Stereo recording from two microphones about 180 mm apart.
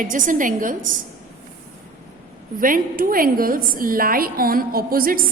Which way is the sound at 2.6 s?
50° right (ahead or behind).